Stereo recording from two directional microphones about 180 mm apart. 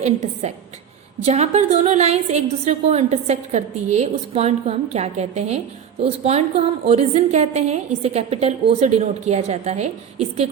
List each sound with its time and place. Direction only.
0.0 s a woman's voice: 40° right (ahead or behind)